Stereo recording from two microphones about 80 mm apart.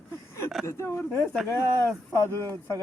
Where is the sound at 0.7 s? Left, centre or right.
Left.